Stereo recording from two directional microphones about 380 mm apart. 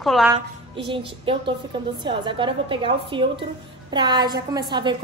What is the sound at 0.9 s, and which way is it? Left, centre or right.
A woman's voice, centre.